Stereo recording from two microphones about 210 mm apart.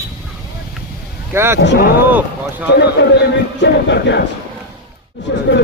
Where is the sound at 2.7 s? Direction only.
50° left (ahead or behind).